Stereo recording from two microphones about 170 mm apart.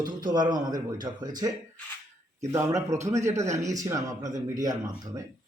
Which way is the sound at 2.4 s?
20° right (ahead or behind).